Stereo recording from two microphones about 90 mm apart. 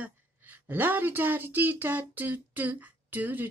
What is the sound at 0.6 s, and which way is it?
Speech, 20° right (ahead or behind).